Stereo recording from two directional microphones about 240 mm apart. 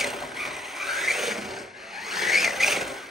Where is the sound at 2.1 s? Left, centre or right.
Centre.